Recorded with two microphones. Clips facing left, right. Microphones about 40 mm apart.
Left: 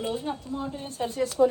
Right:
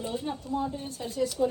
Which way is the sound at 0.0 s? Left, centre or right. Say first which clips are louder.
Left 3 dB; left.